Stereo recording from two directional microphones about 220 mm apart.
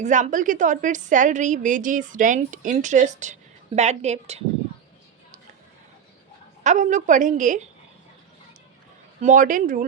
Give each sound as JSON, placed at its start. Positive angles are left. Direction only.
{"t": 0.0, "sound": "a woman's voice", "side_deg": -35}
{"t": 6.6, "sound": "a woman's voice", "side_deg": -35}
{"t": 9.2, "sound": "a woman's voice", "side_deg": -35}